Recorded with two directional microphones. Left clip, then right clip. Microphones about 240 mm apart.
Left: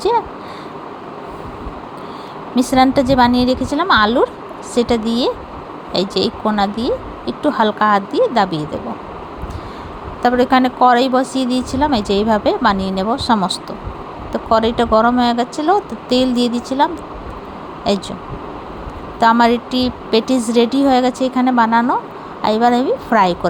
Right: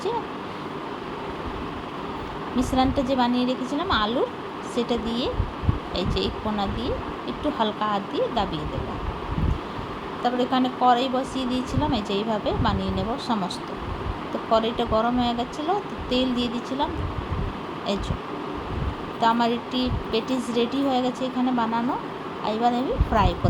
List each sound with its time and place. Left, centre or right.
2.6 s speech: left
10.2 s speech: left
19.2 s speech: left